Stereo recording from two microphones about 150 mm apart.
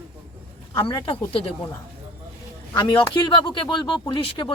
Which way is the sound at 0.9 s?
35° left (ahead or behind).